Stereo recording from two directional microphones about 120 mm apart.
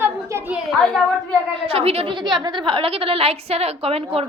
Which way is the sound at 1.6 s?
55° right (ahead or behind).